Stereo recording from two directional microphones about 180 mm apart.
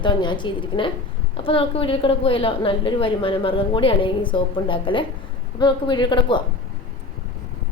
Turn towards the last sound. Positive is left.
turn(degrees=25)  # may be behind; listen again after turning